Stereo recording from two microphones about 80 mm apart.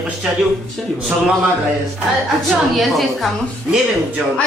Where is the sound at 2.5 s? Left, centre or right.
Centre.